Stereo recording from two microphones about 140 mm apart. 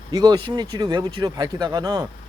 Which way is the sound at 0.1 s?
25° right (ahead or behind).